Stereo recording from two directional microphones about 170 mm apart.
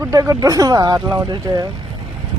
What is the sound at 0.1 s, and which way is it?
Speech, 20° right (ahead or behind).